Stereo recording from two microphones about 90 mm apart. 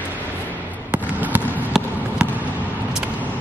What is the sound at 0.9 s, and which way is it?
Fireworks, 20° right (ahead or behind).